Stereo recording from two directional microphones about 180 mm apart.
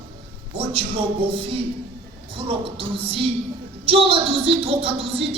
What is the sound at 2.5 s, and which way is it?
Speech, 30° right (ahead or behind).